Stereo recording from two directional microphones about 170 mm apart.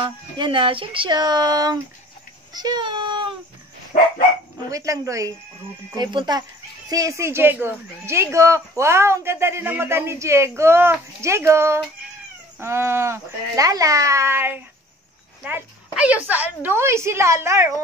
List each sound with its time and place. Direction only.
0.0 s speech: 30° right (ahead or behind)
3.9 s dog: 50° left (ahead or behind)
4.6 s speech: 20° right (ahead or behind)